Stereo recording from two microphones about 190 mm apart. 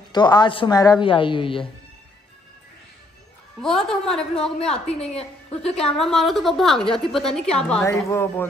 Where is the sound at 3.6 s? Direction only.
Centre (ahead or behind).